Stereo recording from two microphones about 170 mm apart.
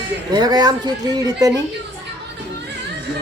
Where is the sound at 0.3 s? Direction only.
25° right (ahead or behind).